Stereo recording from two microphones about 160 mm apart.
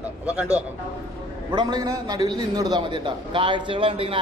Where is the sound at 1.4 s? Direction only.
25° right (ahead or behind).